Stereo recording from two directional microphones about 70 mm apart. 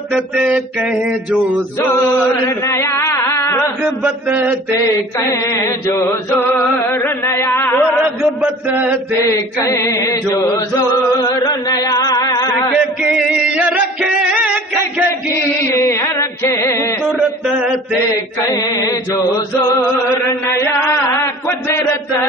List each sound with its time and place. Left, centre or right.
0.5 s mantra: centre
2.6 s a sound: left
4.3 s mantra: right
5.6 s chant: left
8.2 s chant: right
9.2 s chant: left
11.1 s chant: left
13.0 s music: centre
15.7 s music: left
18.5 s chant: left
20.4 s chant: left